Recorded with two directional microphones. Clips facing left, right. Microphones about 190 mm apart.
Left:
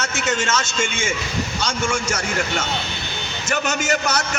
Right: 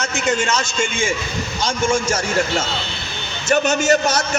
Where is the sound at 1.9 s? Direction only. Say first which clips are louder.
Right 5 dB; 30° right (ahead or behind).